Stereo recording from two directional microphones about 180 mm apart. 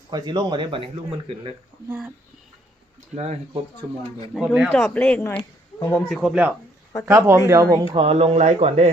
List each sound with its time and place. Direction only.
0.1 s speech: 25° right (ahead or behind)
1.9 s speech: 10° right (ahead or behind)
3.2 s speech: 35° right (ahead or behind)
4.3 s speech: centre (ahead or behind)
6.1 s speech: 5° right (ahead or behind)
7.9 s speech: 35° right (ahead or behind)